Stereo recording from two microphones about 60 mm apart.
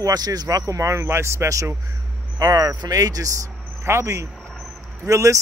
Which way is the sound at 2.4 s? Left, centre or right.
Right.